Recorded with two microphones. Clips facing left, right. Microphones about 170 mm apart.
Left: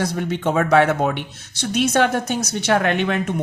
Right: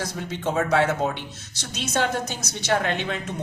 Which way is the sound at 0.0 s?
65° left (ahead or behind).